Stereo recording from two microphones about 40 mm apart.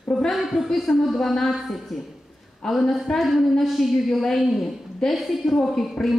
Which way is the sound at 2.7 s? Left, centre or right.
Centre.